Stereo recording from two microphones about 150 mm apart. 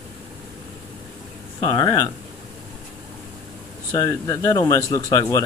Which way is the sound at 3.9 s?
25° left (ahead or behind).